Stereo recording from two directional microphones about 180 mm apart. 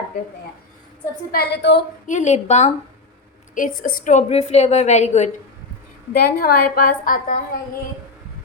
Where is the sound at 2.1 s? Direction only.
40° left (ahead or behind).